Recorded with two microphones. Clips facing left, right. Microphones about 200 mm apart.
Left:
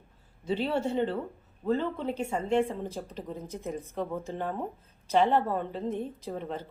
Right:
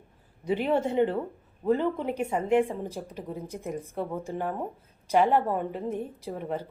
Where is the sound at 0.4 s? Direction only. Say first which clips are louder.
Right 3 dB; 20° right (ahead or behind).